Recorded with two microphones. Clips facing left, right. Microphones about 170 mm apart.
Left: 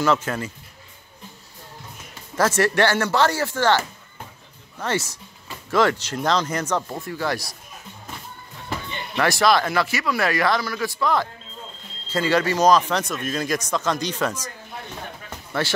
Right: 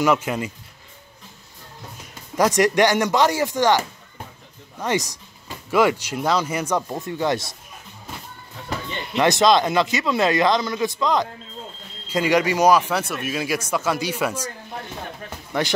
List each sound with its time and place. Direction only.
0.0 s speech: 15° right (ahead or behind)
2.3 s speech: 15° right (ahead or behind)
9.1 s speech: 20° right (ahead or behind)
15.2 s music: 15° right (ahead or behind)